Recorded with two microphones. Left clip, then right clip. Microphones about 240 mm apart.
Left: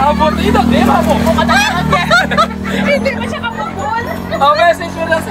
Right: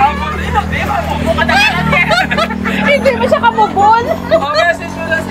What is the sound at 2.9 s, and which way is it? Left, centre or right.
Speech, centre.